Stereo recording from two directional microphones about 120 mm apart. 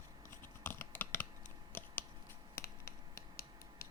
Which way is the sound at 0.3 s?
20° left (ahead or behind).